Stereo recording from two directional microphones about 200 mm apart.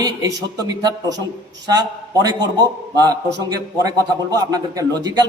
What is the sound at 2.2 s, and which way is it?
Speech, 20° right (ahead or behind).